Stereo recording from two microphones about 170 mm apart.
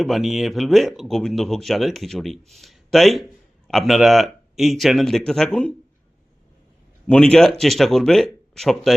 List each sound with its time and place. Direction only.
0.0 s speech: centre (ahead or behind)
7.1 s speech: 5° left (ahead or behind)